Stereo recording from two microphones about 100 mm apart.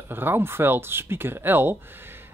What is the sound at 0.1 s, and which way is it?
Speech, 20° right (ahead or behind).